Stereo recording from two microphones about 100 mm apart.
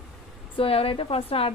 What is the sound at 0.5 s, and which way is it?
Speech, 70° left (ahead or behind).